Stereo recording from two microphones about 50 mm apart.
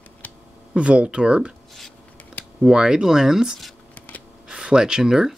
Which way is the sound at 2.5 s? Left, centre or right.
Centre.